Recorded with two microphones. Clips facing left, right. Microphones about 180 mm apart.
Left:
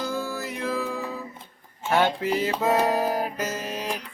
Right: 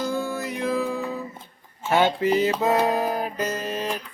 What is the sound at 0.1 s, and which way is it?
Music, centre (ahead or behind).